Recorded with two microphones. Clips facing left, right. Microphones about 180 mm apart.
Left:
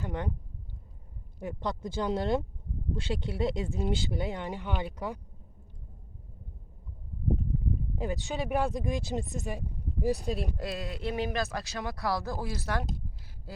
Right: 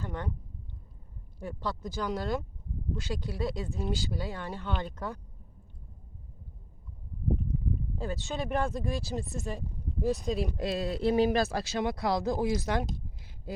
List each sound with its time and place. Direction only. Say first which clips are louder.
0.0 s speech: left 2 dB; 20° left (ahead or behind)
1.4 s speech: left 2 dB; 20° left (ahead or behind)
7.9 s speech: left 2 dB; 15° left (ahead or behind)
10.2 s speech: right 2 dB; centre (ahead or behind)
10.6 s speech: right 5 dB; 30° right (ahead or behind)